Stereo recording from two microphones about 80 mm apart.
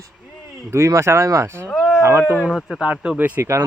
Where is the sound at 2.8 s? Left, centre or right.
Centre.